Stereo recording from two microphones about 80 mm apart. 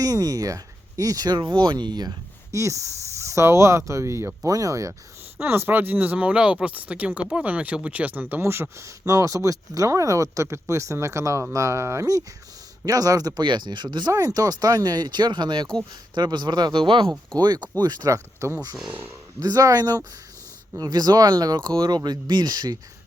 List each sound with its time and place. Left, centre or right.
0.0 s speech: right
1.4 s speech: right
2.5 s speech: right
4.4 s speech: right
5.4 s speech: right
14.1 s speech: right
17.3 s speech: right
18.9 s speech: right
19.4 s speech: right